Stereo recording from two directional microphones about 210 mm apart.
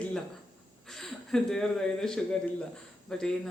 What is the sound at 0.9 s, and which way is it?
Speech, centre (ahead or behind).